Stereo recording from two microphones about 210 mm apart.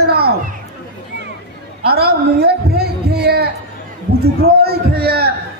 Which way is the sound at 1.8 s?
50° right (ahead or behind).